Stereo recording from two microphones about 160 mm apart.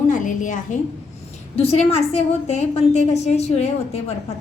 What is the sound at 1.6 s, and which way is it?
A woman's voice, 40° left (ahead or behind).